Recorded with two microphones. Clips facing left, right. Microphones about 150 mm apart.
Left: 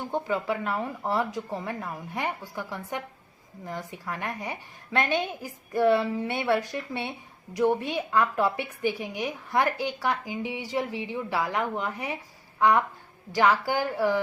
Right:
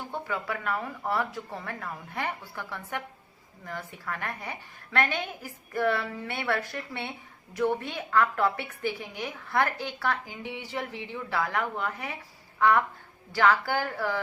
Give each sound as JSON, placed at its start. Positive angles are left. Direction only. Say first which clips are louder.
{"t": 0.1, "sound": "a woman's voice", "louder": "left 6 dB", "side_deg": 20}